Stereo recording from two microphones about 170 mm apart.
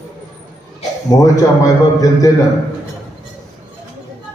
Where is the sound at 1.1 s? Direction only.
20° left (ahead or behind).